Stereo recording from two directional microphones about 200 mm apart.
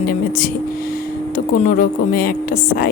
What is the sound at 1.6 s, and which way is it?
A woman's voice, 45° left (ahead or behind).